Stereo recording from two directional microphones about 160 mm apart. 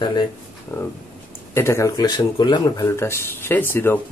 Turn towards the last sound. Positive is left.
turn(degrees=15)  # may be behind; listen again after turning